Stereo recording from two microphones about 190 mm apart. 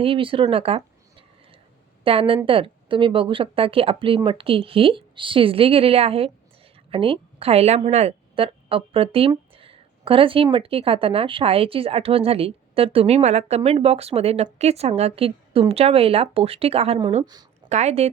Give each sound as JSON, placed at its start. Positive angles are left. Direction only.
{"t": 0.0, "sound": "speech", "side_deg": -30}
{"t": 2.0, "sound": "a woman's voice", "side_deg": -30}